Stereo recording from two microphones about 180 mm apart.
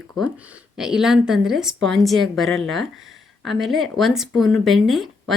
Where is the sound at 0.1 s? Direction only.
5° right (ahead or behind).